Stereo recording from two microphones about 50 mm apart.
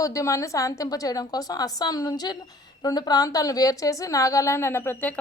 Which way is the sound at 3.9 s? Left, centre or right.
Left.